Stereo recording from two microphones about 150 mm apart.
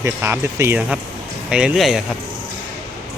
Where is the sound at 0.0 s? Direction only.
15° right (ahead or behind); by 2.0 s centre (ahead or behind).